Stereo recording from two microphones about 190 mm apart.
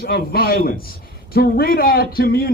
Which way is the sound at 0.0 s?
55° left (ahead or behind).